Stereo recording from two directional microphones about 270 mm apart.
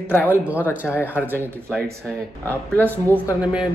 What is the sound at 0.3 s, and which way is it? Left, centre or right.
Speech, centre.